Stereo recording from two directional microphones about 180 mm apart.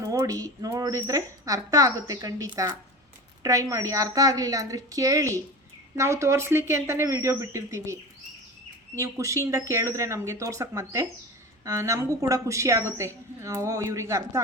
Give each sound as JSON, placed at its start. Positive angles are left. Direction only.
{"t": 0.0, "sound": "speech", "side_deg": -20}
{"t": 9.0, "sound": "speech", "side_deg": -15}